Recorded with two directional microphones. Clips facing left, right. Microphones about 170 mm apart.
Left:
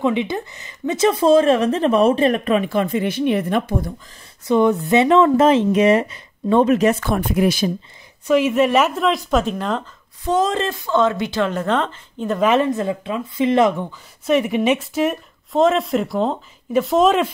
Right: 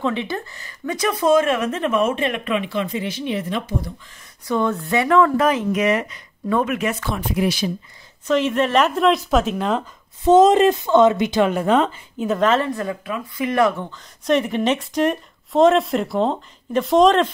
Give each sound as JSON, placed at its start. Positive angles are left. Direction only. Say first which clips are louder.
{"t": 0.0, "sound": "speech", "louder": "left 4 dB", "side_deg": 15}
{"t": 4.5, "sound": "speech", "louder": "left 5 dB", "side_deg": 20}
{"t": 7.0, "sound": "speech", "louder": "left 4 dB", "side_deg": 50}
{"t": 8.3, "sound": "speech", "louder": "left 3 dB", "side_deg": 10}
{"t": 10.2, "sound": "speech", "louder": "right 7 dB", "side_deg": -20}
{"t": 12.5, "sound": "speech", "louder": "left 4 dB", "side_deg": 20}